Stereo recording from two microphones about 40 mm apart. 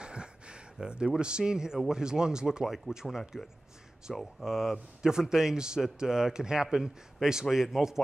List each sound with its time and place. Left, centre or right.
0.0 s a sound: right
0.8 s a man's voice: right
4.1 s speech: centre
4.5 s a man's voice: centre